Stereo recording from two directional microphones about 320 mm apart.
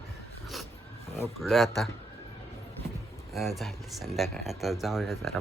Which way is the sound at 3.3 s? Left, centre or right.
Centre.